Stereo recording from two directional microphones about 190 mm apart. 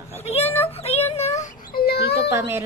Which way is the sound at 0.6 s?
30° left (ahead or behind).